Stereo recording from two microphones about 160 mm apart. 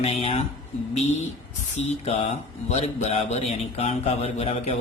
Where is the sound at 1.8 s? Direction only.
40° left (ahead or behind).